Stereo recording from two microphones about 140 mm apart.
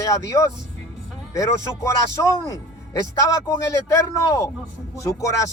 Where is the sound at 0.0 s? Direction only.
20° left (ahead or behind).